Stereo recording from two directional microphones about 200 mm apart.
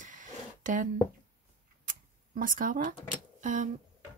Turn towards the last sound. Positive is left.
turn(degrees=-40)  # may be behind; listen again after turning